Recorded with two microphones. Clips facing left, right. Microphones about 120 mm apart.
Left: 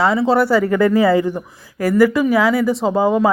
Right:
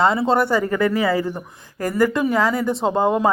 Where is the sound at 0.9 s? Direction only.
30° left (ahead or behind).